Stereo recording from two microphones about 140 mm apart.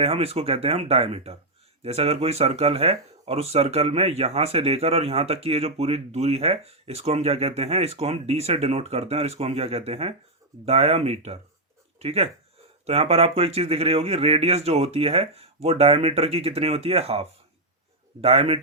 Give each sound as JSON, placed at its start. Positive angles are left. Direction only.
{"t": 0.0, "sound": "speech", "side_deg": -45}